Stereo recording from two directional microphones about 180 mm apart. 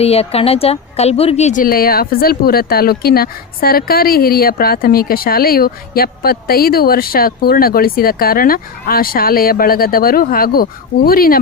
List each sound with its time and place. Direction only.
0.0 s a woman's voice: 35° left (ahead or behind); by 11.3 s 55° left (ahead or behind)